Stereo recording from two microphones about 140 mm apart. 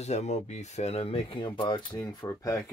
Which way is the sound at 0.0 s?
55° left (ahead or behind).